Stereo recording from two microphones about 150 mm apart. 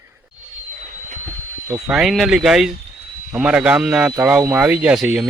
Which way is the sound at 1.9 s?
Centre (ahead or behind).